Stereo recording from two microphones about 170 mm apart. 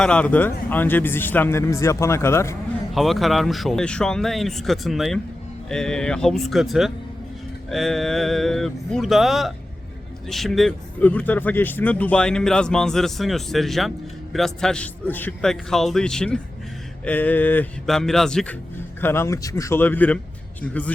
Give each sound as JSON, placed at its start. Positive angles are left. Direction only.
{"t": 0.0, "sound": "speech", "side_deg": 5}
{"t": 2.9, "sound": "speech", "side_deg": 0}
{"t": 18.9, "sound": "speech", "side_deg": 15}